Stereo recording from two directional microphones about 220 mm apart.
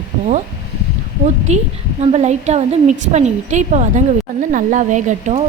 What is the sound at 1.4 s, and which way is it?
A woman's voice, 30° right (ahead or behind).